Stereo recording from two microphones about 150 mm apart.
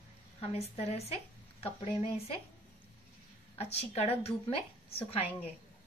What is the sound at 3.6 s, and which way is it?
A woman's voice, 45° left (ahead or behind).